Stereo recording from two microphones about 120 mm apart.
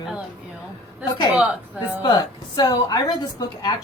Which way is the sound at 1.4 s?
10° right (ahead or behind).